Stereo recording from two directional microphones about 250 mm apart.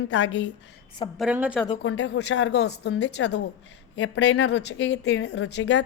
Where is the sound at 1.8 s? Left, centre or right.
Left.